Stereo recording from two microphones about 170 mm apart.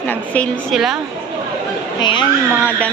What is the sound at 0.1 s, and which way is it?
Speech, 10° left (ahead or behind).